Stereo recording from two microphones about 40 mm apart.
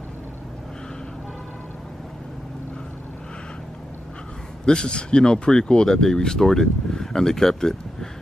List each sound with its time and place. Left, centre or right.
4.6 s speech: left